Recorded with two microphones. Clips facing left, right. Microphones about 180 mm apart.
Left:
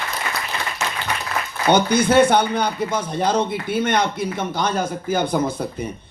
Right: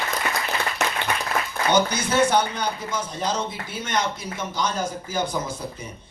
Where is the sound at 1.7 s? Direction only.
55° left (ahead or behind).